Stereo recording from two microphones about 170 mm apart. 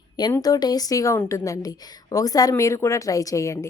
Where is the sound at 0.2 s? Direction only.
25° left (ahead or behind).